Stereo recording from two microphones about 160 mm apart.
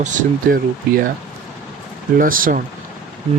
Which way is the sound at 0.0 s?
50° right (ahead or behind).